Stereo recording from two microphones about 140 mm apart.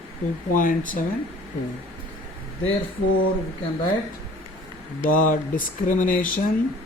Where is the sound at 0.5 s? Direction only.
75° left (ahead or behind).